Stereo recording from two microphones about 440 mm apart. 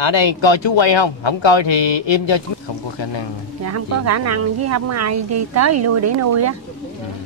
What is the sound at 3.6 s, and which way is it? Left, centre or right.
Speech, right.